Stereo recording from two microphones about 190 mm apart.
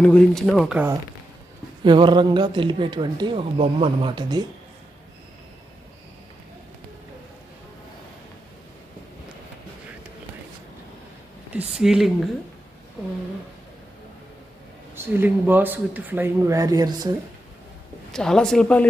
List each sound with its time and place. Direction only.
0.0 s speech: 5° left (ahead or behind)
1.9 s speech: 25° right (ahead or behind)
11.5 s speech: 5° right (ahead or behind)
15.0 s speech: 10° right (ahead or behind)
18.1 s speech: 5° left (ahead or behind)